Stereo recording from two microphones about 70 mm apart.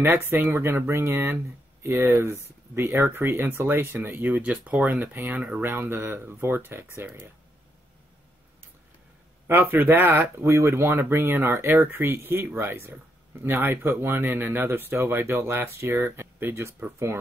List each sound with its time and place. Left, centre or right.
0.0 s speech: right
5.6 s speech: right
9.5 s speech: right